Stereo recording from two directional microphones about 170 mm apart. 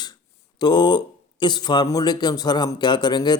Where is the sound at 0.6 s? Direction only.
25° left (ahead or behind).